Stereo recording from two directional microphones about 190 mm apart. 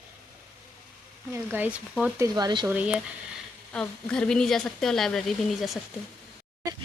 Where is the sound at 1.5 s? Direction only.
10° right (ahead or behind).